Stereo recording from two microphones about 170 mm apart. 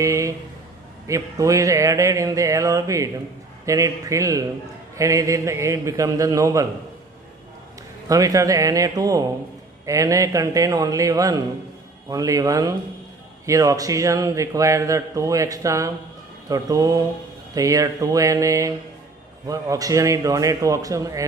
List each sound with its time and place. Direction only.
0.0 s a sound: 20° right (ahead or behind)
1.0 s a man's voice: 20° right (ahead or behind)
8.1 s a man's voice: 20° right (ahead or behind)